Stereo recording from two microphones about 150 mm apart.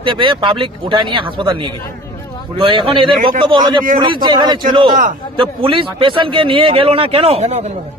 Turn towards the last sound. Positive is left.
turn(degrees=-45)  # may be behind; listen again after turning